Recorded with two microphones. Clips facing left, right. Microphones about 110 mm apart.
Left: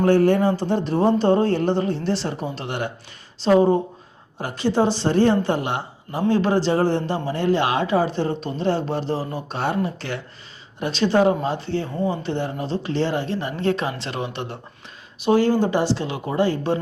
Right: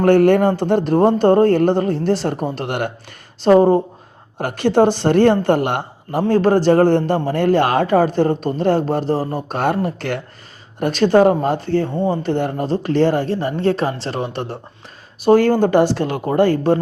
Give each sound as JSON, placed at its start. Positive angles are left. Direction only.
{"t": 0.0, "sound": "speech", "side_deg": -65}
{"t": 4.4, "sound": "speech", "side_deg": -60}
{"t": 11.9, "sound": "speech", "side_deg": -30}
{"t": 12.2, "sound": "speech", "side_deg": -50}